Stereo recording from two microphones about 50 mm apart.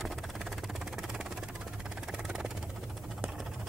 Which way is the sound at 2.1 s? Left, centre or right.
Centre.